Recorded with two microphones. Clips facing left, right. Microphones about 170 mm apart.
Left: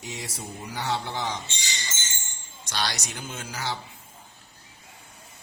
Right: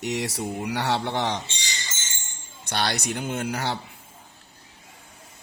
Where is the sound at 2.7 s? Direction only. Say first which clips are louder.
Right 5 dB; 55° right (ahead or behind).